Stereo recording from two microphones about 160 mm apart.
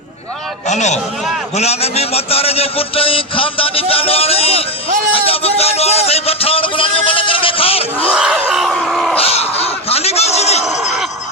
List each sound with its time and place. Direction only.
0.7 s a man's voice: 45° left (ahead or behind)
8.1 s groan: 5° right (ahead or behind)
9.1 s a sound: 40° left (ahead or behind)